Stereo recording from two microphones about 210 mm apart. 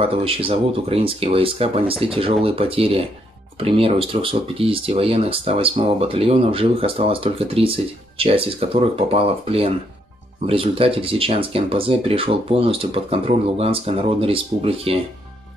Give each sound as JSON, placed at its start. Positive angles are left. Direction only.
{"t": 0.0, "sound": "speech", "side_deg": -25}